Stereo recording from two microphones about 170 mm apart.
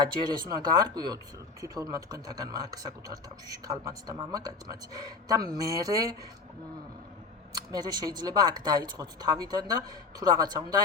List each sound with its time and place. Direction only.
0.3 s speech: 25° right (ahead or behind)
7.5 s speech: 25° right (ahead or behind)